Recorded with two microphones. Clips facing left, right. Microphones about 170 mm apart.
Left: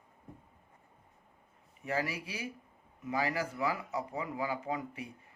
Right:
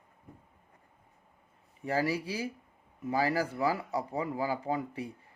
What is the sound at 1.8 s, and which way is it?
Speech, 35° right (ahead or behind).